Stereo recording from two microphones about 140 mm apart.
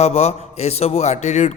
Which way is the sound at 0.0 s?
50° left (ahead or behind).